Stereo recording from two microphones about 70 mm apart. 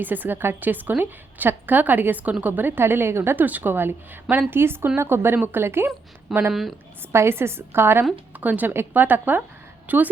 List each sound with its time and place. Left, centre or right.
0.0 s a woman's voice: right
6.5 s a woman's voice: centre
7.1 s a woman's voice: right